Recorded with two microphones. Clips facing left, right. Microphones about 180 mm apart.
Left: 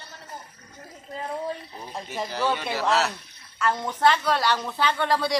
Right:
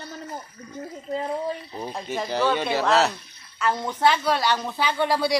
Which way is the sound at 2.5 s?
20° right (ahead or behind).